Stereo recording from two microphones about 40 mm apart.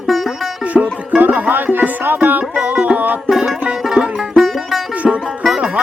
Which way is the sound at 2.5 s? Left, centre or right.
Right.